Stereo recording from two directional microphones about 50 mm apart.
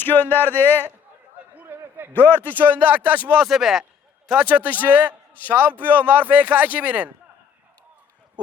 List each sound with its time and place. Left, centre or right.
0.0 s speech: left
1.6 s a sound: right
2.1 s a man's voice: left
2.6 s speech: right
3.4 s speech: centre
4.4 s speech: right